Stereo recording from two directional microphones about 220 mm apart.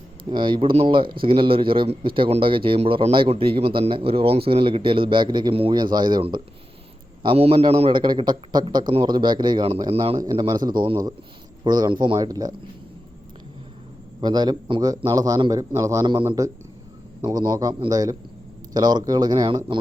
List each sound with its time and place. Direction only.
0.3 s a man's voice: 20° right (ahead or behind)
14.2 s a man's voice: 20° right (ahead or behind)